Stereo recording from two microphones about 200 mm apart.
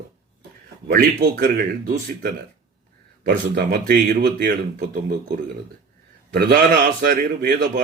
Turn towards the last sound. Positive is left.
turn(degrees=-55)  # may be behind; listen again after turning